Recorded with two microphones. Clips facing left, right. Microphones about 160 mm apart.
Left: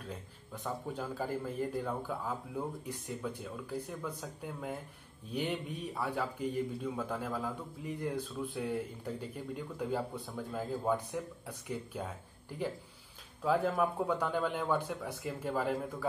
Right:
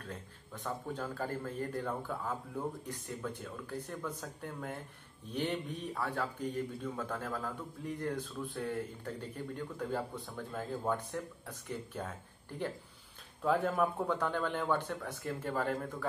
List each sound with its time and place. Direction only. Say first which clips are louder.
0.7 s a man's voice: left 1 dB; 10° left (ahead or behind)